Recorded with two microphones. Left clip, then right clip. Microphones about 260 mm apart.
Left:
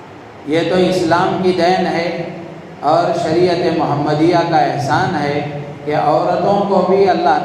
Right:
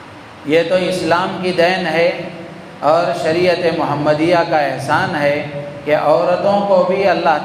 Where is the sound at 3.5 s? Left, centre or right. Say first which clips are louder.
Even; right.